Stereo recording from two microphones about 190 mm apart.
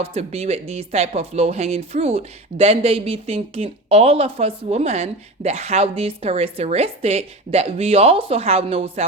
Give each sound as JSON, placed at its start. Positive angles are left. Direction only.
{"t": 0.0, "sound": "speech", "side_deg": -35}